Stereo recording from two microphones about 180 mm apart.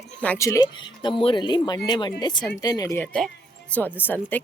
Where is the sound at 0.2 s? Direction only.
10° left (ahead or behind).